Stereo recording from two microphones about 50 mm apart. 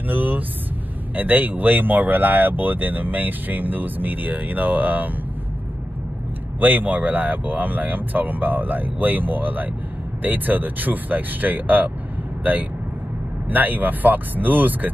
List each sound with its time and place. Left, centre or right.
0.1 s speech: right
6.6 s speech: right
13.5 s speech: right